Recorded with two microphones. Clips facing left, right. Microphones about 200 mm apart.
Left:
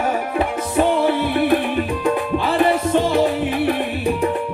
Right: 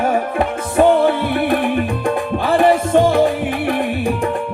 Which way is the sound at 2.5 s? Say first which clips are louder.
Right 4 dB; 50° right (ahead or behind).